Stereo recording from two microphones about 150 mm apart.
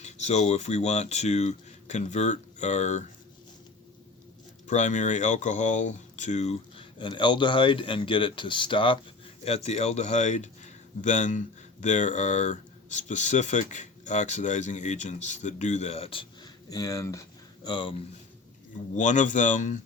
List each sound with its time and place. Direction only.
0.0 s speech: 50° left (ahead or behind)
4.6 s speech: 55° left (ahead or behind); by 9.0 s 35° left (ahead or behind)
9.4 s speech: 45° left (ahead or behind)
16.6 s speech: 25° left (ahead or behind)
18.9 s speech: 55° left (ahead or behind)